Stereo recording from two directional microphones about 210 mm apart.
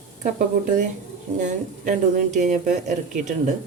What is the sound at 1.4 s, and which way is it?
A woman's voice, 35° right (ahead or behind).